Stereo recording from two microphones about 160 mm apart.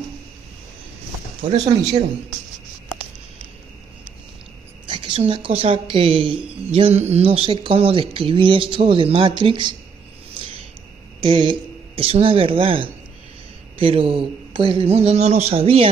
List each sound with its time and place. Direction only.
4.8 s a woman's voice: 30° right (ahead or behind)
11.2 s speech: 35° right (ahead or behind)